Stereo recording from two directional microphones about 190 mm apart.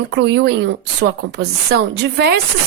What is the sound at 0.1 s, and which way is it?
A woman's voice, 65° right (ahead or behind).